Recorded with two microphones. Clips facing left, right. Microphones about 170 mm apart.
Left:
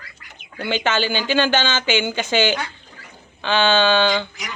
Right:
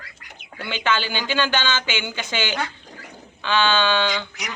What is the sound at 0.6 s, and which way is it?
Speech, 45° left (ahead or behind).